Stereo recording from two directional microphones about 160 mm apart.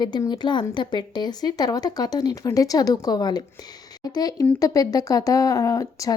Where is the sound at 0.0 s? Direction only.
25° left (ahead or behind).